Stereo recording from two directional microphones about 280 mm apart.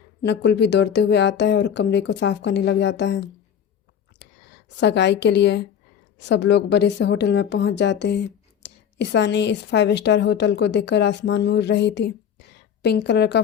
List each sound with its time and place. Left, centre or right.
0.2 s a woman's voice: left
4.8 s a woman's voice: left